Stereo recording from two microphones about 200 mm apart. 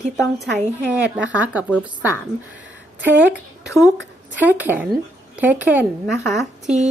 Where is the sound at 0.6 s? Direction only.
10° right (ahead or behind).